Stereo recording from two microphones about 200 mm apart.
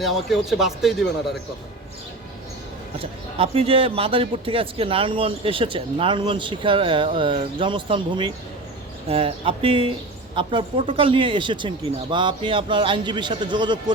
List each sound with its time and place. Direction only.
0.0 s speech: centre (ahead or behind)
3.0 s speech: 30° right (ahead or behind)